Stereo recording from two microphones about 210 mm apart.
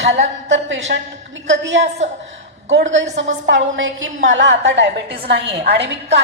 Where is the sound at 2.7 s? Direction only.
60° right (ahead or behind).